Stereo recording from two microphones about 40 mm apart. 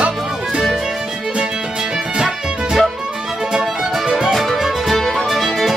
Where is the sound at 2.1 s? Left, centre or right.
Right.